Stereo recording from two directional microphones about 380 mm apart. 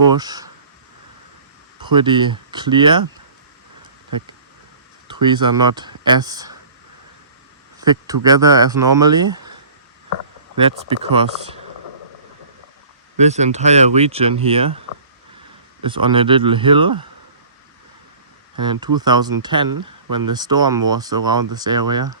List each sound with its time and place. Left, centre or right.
0.1 s speech: centre
1.8 s speech: centre
5.2 s speech: centre
7.8 s speech: centre
10.6 s speech: centre
13.1 s speech: centre
15.8 s speech: centre
18.6 s speech: centre